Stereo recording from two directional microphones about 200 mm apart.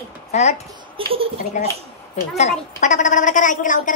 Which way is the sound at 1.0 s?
30° right (ahead or behind).